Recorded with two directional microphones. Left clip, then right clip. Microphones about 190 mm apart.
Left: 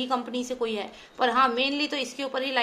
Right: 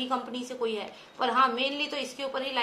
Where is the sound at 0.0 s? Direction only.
45° left (ahead or behind).